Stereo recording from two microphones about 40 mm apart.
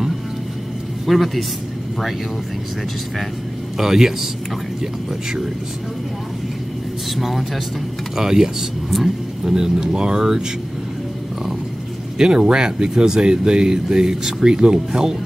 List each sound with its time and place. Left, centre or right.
1.0 s a man's voice: centre
3.7 s speech: centre
7.2 s a man's voice: centre
8.2 s speech: centre
8.9 s a man's voice: centre
9.4 s speech: centre
12.2 s speech: right